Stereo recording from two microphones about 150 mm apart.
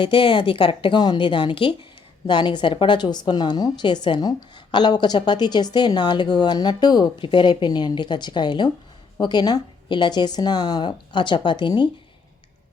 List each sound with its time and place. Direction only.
0.0 s a woman's voice: 35° left (ahead or behind)